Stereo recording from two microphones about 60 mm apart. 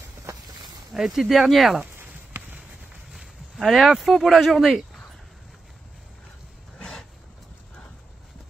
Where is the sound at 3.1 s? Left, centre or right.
Centre.